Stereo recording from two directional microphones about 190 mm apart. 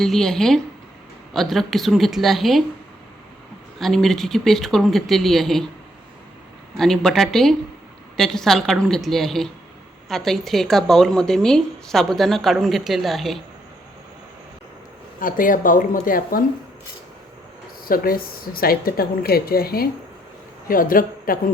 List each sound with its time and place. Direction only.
0.0 s speech: centre (ahead or behind)
3.8 s speech: centre (ahead or behind)
6.7 s speech: centre (ahead or behind)
15.2 s a woman's voice: 45° left (ahead or behind)
17.8 s a woman's voice: 50° left (ahead or behind)